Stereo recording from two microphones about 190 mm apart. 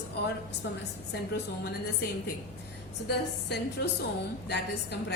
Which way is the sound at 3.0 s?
60° left (ahead or behind).